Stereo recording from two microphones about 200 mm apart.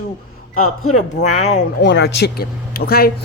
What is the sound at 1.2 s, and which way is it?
Speech, 35° left (ahead or behind).